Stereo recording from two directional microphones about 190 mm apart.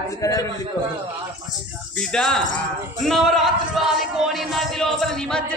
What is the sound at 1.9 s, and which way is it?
A man's voice, 5° left (ahead or behind).